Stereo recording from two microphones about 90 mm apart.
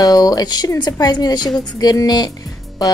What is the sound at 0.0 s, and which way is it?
Speech, 45° left (ahead or behind).